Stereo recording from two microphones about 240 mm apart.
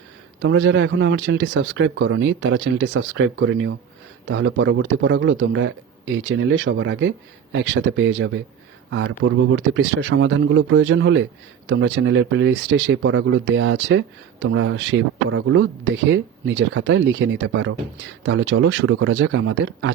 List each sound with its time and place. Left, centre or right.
0.4 s speech: right